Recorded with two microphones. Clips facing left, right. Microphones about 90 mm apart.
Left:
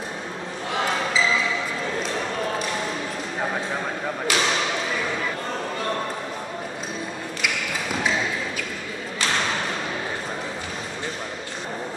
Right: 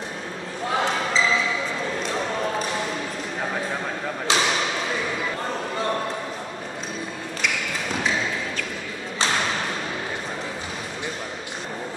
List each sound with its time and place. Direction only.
4.3 s basketball bounce: 25° right (ahead or behind)